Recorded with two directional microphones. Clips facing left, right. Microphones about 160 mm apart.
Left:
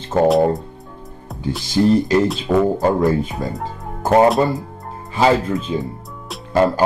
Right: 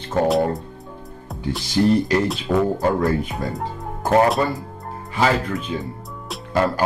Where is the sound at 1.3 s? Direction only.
Centre (ahead or behind).